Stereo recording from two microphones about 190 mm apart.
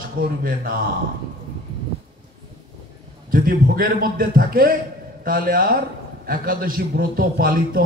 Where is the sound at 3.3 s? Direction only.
50° right (ahead or behind).